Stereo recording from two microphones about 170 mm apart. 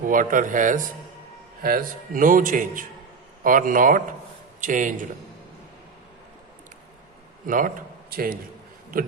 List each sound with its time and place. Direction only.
0.0 s a man's voice: 50° right (ahead or behind)
7.4 s a man's voice: 50° right (ahead or behind)